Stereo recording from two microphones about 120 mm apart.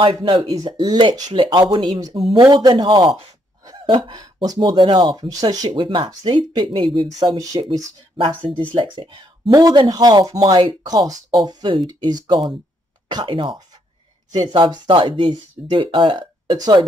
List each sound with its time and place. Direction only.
0.0 s speech: 45° right (ahead or behind)
2.1 s speech: 50° right (ahead or behind)
2.4 s speech: 35° right (ahead or behind)
5.7 s speech: 45° right (ahead or behind)
7.1 s speech: 30° right (ahead or behind)
8.2 s speech: 45° right (ahead or behind)